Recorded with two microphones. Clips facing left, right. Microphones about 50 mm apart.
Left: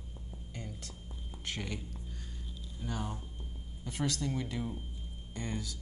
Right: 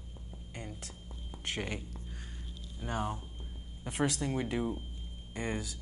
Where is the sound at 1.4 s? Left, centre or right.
Right.